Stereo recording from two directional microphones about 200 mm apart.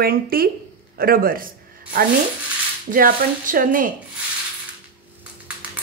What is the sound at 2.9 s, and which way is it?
Speech, 45° right (ahead or behind).